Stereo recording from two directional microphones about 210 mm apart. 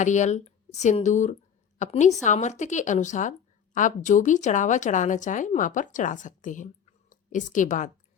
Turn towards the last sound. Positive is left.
turn(degrees=35)  # may be behind; listen again after turning